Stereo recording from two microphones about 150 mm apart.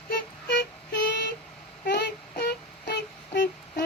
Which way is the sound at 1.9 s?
90° left.